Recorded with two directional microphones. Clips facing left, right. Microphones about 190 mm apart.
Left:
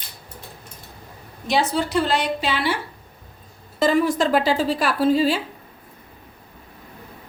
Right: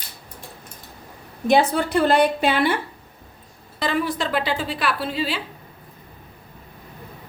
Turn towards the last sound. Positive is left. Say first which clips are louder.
# left 7 dB
turn(degrees=45)  # may be behind; listen again after turning